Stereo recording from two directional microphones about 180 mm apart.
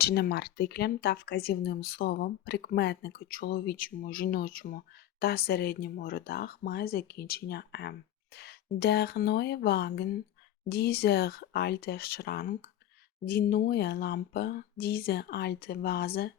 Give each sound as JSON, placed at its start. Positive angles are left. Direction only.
{"t": 0.0, "sound": "speech", "side_deg": 60}